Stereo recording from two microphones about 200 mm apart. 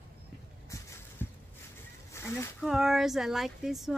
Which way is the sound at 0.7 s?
15° left (ahead or behind).